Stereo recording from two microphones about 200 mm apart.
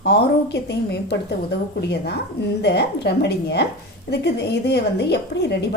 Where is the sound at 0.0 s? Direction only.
55° left (ahead or behind).